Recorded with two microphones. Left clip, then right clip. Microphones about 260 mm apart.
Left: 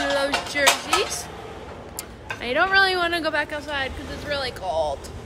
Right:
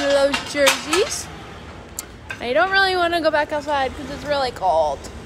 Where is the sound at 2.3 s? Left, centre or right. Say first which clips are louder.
Right 2 dB; centre.